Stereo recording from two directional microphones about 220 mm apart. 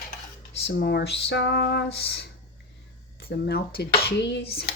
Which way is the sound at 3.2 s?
45° left (ahead or behind).